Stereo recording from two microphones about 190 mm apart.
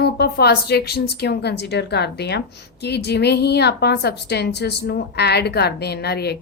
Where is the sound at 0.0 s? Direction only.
55° left (ahead or behind).